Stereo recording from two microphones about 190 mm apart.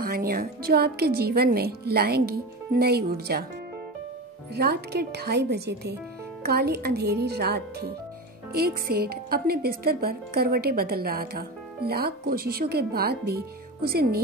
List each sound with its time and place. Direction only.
0.1 s a woman's voice: 55° right (ahead or behind)
4.6 s a woman's voice: 55° right (ahead or behind)